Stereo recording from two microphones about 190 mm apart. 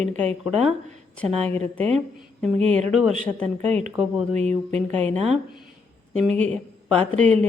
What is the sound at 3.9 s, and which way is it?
Speech, 5° right (ahead or behind).